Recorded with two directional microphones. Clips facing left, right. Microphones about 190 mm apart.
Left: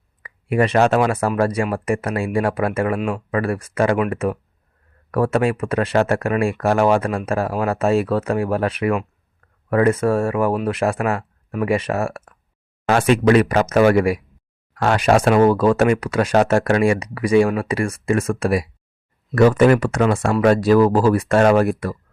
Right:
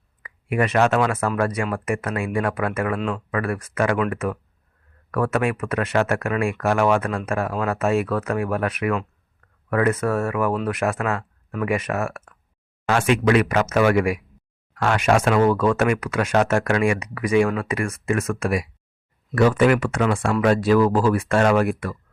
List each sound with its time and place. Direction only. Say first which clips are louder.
0.2 s speech: left 4 dB; 35° left (ahead or behind)